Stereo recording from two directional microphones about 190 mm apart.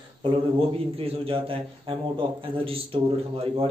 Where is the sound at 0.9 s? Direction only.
30° right (ahead or behind).